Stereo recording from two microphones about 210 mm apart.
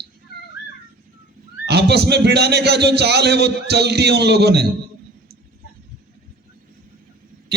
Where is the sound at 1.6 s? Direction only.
50° right (ahead or behind).